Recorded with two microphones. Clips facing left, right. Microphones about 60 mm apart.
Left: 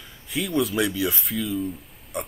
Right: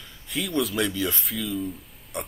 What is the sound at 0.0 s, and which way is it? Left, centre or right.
Speech, centre.